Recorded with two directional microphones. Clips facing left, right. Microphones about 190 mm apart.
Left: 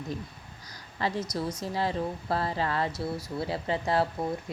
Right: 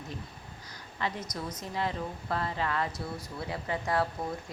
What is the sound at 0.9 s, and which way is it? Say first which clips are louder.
Speech: left 4 dB; 35° left (ahead or behind).